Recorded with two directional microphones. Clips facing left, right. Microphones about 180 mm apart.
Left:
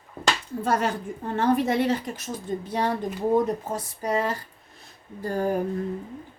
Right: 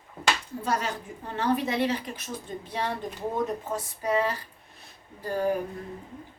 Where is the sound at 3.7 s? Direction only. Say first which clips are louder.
Left 1 dB; 40° left (ahead or behind).